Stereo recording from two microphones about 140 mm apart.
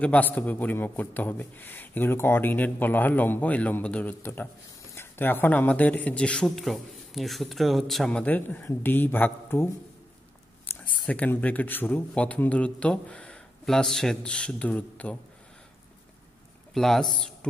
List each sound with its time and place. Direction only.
0.0 s a man's voice: 10° left (ahead or behind)
10.7 s a man's voice: 10° left (ahead or behind)
16.7 s a man's voice: centre (ahead or behind)